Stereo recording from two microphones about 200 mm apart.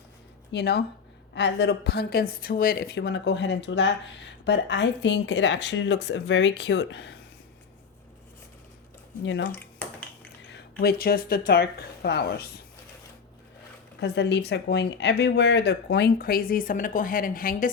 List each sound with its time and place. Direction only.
0.5 s speech: 55° left (ahead or behind)
9.2 s speech: 65° left (ahead or behind)
9.5 s a sound: 10° left (ahead or behind)
10.5 s speech: 50° left (ahead or behind)
14.0 s speech: 60° left (ahead or behind)